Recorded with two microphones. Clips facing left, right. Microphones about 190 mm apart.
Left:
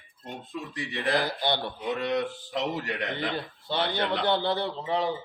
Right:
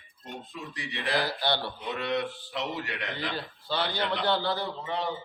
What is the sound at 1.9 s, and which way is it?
Speech, 40° left (ahead or behind).